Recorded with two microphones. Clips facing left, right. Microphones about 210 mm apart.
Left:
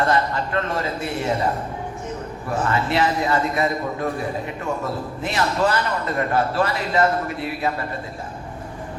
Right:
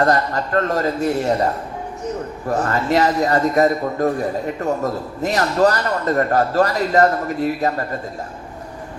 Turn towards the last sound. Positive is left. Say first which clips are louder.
# right 5 dB
turn(degrees=-40)  # may be behind; listen again after turning